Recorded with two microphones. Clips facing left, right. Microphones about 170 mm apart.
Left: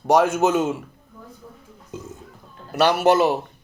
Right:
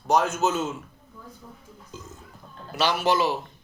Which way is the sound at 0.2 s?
60° left (ahead or behind).